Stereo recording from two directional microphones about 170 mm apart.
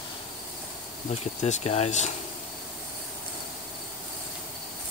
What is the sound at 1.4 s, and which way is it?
Speech, 40° left (ahead or behind).